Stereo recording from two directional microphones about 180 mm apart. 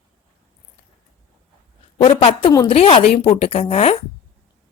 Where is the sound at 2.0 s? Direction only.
30° left (ahead or behind).